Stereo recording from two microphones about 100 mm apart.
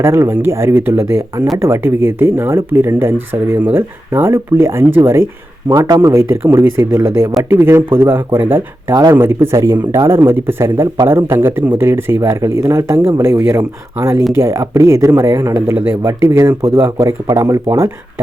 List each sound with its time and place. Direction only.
0.0 s speech: 25° right (ahead or behind)
8.9 s speech: 40° right (ahead or behind)
9.1 s speech: 20° right (ahead or behind)